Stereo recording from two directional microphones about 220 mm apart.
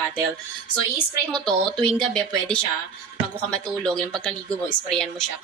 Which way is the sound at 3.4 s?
5° left (ahead or behind).